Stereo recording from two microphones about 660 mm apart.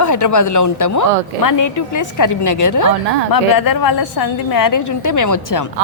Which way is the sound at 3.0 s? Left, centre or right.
Right.